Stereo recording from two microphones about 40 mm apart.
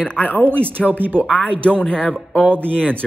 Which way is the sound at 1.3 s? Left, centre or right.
Left.